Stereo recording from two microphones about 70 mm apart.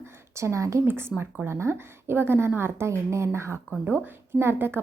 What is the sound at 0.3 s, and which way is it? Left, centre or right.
Speech, right.